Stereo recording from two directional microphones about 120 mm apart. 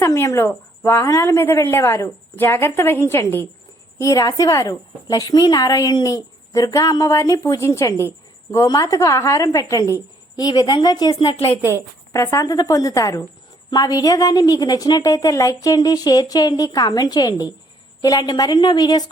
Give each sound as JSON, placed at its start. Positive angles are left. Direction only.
{"t": 0.0, "sound": "a woman's voice", "side_deg": 25}
{"t": 11.3, "sound": "a woman's voice", "side_deg": 55}
{"t": 12.1, "sound": "a woman's voice", "side_deg": 25}